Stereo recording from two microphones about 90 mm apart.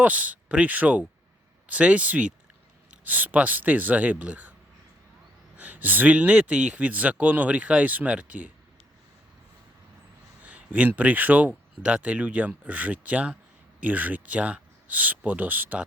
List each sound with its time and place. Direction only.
0.0 s speech: 15° right (ahead or behind)
5.5 s speech: 15° right (ahead or behind)
10.4 s speech: 15° right (ahead or behind)